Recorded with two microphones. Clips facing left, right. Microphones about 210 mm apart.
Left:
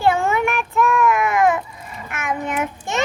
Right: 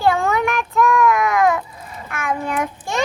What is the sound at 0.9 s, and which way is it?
Baby cry, centre (ahead or behind).